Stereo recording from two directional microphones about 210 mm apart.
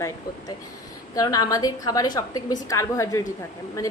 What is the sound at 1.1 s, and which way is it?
A woman's voice, 15° left (ahead or behind).